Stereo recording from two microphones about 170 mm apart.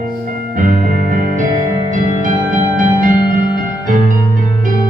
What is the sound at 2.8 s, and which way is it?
Music, 50° right (ahead or behind).